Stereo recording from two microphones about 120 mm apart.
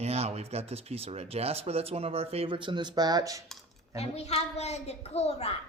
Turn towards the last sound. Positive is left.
turn(degrees=60)  # may be behind; listen again after turning